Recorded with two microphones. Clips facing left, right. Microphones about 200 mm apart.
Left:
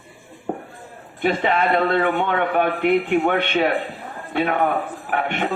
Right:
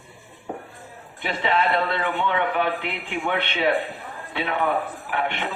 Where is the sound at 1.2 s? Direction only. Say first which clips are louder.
Left 4 dB; 50° left (ahead or behind).